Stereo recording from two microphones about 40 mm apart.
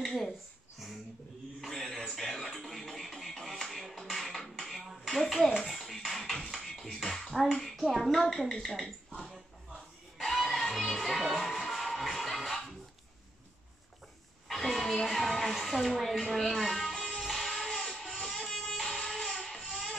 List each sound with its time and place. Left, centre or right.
0.0 s a sound: centre
1.6 s music: centre
5.0 s a sound: centre
5.7 s music: centre
7.7 s speech: centre
8.6 s speech: centre
10.1 s music: centre
14.5 s speech: centre
17.0 s music: centre
18.9 s vehicle: centre
19.1 s a sound: centre